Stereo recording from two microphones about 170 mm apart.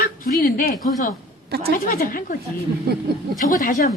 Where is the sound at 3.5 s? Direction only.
55° left (ahead or behind).